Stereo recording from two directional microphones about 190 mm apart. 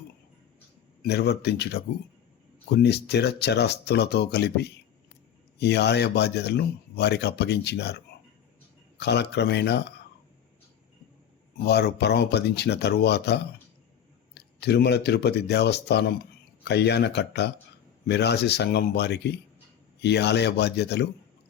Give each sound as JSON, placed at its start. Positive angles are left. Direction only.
{"t": 1.0, "sound": "speech", "side_deg": 60}
{"t": 11.6, "sound": "speech", "side_deg": 60}